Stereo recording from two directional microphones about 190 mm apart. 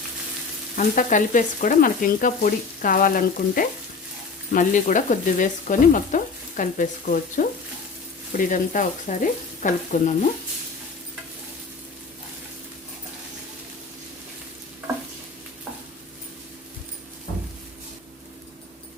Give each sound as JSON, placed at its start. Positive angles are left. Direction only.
{"t": 0.8, "sound": "stir", "side_deg": 45}